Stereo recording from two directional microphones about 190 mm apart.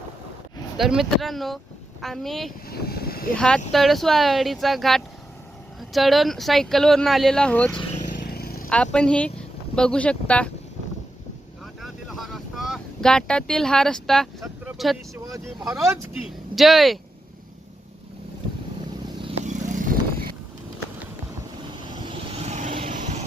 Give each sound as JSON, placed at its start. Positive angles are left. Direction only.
{"t": 0.8, "sound": "speech", "side_deg": 0}
{"t": 2.6, "sound": "vehicle", "side_deg": 55}
{"t": 3.3, "sound": "speech", "side_deg": 5}
{"t": 8.2, "sound": "a sound", "side_deg": 55}
{"t": 8.7, "sound": "speech", "side_deg": 5}
{"t": 11.8, "sound": "boat", "side_deg": 0}
{"t": 15.9, "sound": "speech", "side_deg": -5}
{"t": 19.5, "sound": "vehicle", "side_deg": -45}
{"t": 21.9, "sound": "vehicle", "side_deg": -25}